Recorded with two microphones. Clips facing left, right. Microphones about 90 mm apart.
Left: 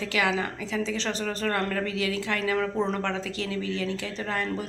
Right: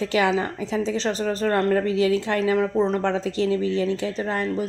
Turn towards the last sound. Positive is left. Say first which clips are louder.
# right 5 dB
turn(degrees=-25)  # may be behind; listen again after turning